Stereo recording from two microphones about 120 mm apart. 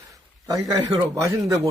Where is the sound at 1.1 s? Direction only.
30° right (ahead or behind).